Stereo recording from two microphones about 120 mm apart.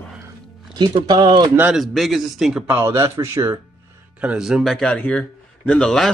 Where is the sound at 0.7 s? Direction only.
40° right (ahead or behind).